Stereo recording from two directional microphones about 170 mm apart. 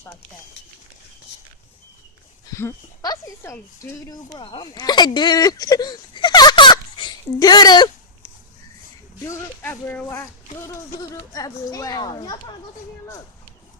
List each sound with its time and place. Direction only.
2.5 s speech: 20° left (ahead or behind)
9.2 s speech: 15° left (ahead or behind)